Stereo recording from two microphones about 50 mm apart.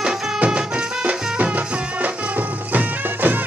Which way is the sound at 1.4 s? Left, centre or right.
Right.